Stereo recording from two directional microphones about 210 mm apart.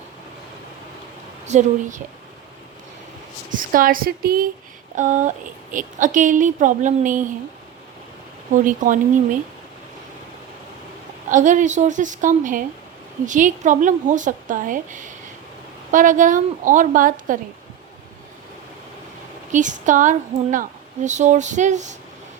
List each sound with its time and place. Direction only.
1.5 s speech: 35° right (ahead or behind)
3.5 s speech: 40° right (ahead or behind)
8.6 s speech: 40° right (ahead or behind)
11.3 s speech: 35° right (ahead or behind)
19.5 s speech: 35° right (ahead or behind)